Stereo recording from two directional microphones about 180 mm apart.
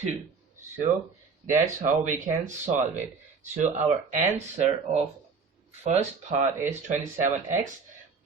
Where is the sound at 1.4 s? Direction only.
45° right (ahead or behind).